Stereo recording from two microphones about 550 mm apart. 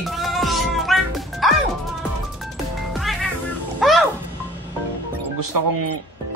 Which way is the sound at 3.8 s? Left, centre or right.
Centre.